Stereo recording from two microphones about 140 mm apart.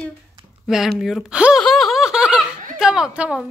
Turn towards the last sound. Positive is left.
turn(degrees=-5)  # may be behind; listen again after turning